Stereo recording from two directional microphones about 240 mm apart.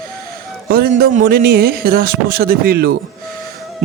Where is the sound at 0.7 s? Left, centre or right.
Right.